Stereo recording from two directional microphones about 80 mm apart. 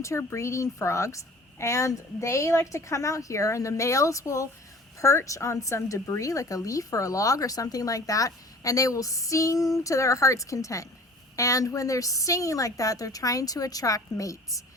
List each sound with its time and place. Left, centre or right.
0.0 s a woman's voice: left